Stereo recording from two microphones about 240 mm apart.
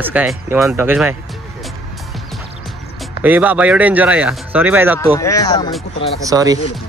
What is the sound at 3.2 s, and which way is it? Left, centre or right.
Speech, centre.